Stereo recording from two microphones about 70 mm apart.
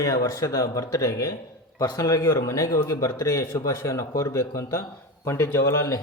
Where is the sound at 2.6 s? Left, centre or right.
Left.